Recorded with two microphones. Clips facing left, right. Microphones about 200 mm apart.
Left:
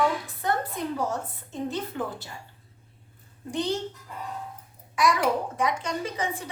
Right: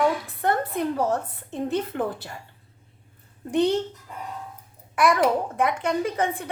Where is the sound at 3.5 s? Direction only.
60° right (ahead or behind).